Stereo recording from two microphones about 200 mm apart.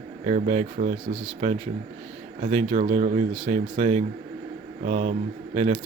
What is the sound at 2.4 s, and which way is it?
Speech, 35° right (ahead or behind).